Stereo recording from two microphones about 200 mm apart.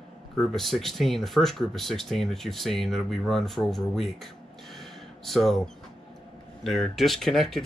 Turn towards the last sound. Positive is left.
turn(degrees=0)  # may be behind; listen again after turning